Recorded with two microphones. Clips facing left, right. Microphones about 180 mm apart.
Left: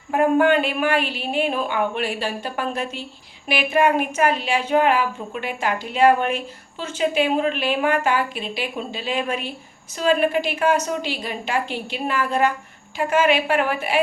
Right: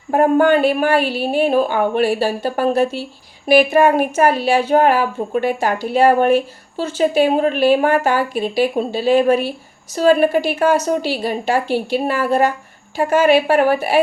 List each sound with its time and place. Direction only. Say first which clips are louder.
0.1 s a woman's voice: right 4 dB; 40° right (ahead or behind)